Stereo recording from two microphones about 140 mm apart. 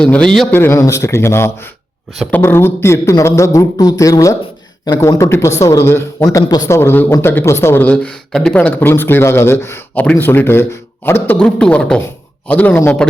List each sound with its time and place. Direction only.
0.0 s speech: 5° left (ahead or behind)
0.5 s speech: 20° left (ahead or behind)